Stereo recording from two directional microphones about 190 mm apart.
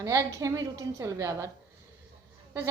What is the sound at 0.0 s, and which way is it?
A woman's voice, 15° right (ahead or behind).